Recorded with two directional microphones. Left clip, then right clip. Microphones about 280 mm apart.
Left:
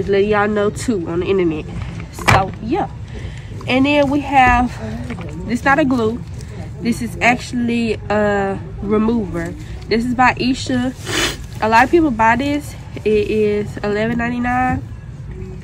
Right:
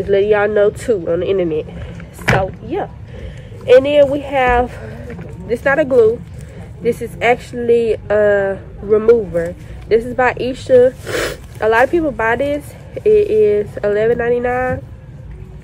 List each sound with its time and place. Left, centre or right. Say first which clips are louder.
0.1 s speech: right 3 dB; centre
3.6 s speech: right 6 dB; centre